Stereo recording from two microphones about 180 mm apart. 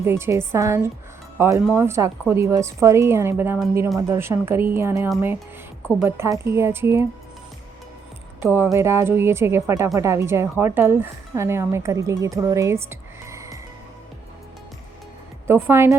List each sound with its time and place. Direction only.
0.0 s a woman's voice: 15° right (ahead or behind)
8.4 s a woman's voice: 10° right (ahead or behind)
15.4 s a woman's voice: 15° right (ahead or behind)